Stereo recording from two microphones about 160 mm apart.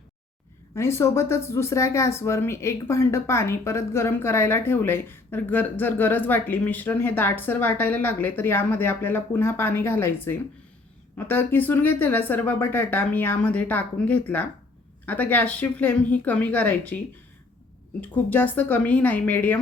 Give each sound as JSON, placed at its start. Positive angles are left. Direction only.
{"t": 0.8, "sound": "speech", "side_deg": 15}
{"t": 18.0, "sound": "speech", "side_deg": 10}